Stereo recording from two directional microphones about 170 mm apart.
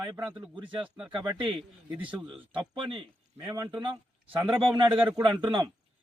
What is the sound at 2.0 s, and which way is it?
Speech, 10° right (ahead or behind).